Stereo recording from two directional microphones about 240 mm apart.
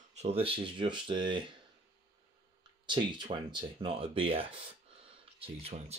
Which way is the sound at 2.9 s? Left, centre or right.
Centre.